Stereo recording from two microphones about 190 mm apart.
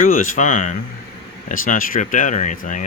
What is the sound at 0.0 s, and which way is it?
Speech, 45° left (ahead or behind).